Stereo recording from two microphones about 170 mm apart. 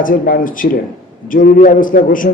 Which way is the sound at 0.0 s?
55° left (ahead or behind).